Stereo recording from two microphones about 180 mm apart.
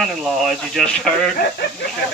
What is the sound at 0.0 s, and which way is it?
Speech, centre (ahead or behind).